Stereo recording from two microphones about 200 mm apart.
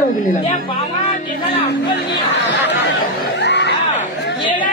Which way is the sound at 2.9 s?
60° left (ahead or behind).